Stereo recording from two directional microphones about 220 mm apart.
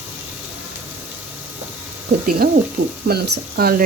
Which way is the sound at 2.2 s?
40° right (ahead or behind).